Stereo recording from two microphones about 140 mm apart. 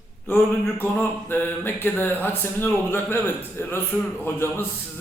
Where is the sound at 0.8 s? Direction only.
15° left (ahead or behind).